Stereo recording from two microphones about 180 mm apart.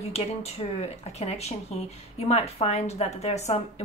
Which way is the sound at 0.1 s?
35° left (ahead or behind).